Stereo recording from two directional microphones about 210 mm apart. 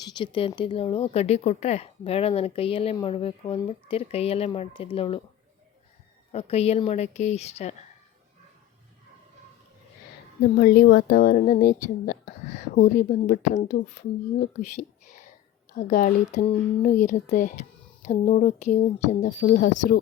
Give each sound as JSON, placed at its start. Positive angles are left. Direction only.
{"t": 0.0, "sound": "speech", "side_deg": 20}
{"t": 6.3, "sound": "speech", "side_deg": 30}
{"t": 10.6, "sound": "speech", "side_deg": 50}
{"t": 15.7, "sound": "speech", "side_deg": 40}